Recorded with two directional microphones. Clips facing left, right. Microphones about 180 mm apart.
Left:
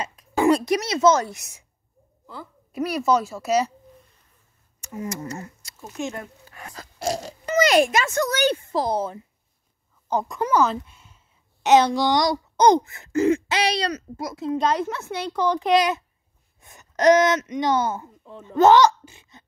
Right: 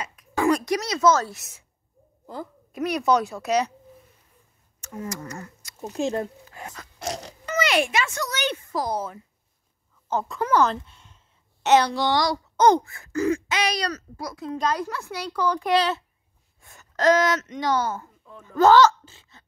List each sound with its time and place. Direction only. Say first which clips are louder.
0.0 s speech: left 3 dB; 30° left (ahead or behind)
2.7 s speech: even; 5° left (ahead or behind)
4.8 s a sound: left 2 dB; 10° left (ahead or behind)
5.1 s speech: left 3 dB; 25° left (ahead or behind)
5.8 s speech: right 5 dB; 35° right (ahead or behind)
6.7 s oink: left 6 dB; 30° left (ahead or behind)
8.6 s speech: left 4 dB; 25° left (ahead or behind)
10.0 s speech: left 2 dB; 15° left (ahead or behind)